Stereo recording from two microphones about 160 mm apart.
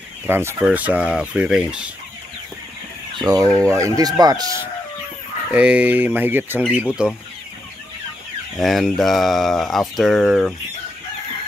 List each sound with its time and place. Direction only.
0.3 s speech: 15° right (ahead or behind)
3.2 s fowl: 25° right (ahead or behind)
3.5 s speech: 20° right (ahead or behind)
5.5 s speech: 5° right (ahead or behind)
8.5 s speech: centre (ahead or behind)